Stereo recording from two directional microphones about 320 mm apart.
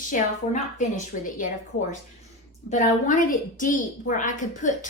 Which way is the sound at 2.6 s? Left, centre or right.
Left.